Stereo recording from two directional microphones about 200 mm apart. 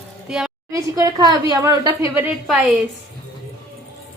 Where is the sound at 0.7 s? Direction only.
15° right (ahead or behind).